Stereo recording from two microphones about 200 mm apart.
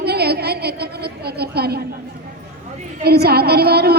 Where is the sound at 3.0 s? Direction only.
55° right (ahead or behind).